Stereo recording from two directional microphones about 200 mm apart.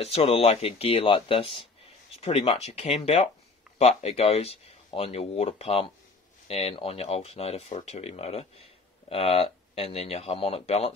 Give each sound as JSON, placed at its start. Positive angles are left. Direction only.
{"t": 0.0, "sound": "speech", "side_deg": 30}